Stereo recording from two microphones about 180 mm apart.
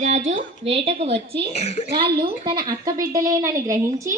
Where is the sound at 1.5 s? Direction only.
35° left (ahead or behind).